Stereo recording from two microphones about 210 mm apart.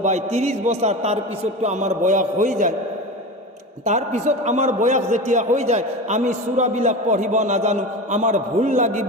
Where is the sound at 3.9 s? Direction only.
35° right (ahead or behind).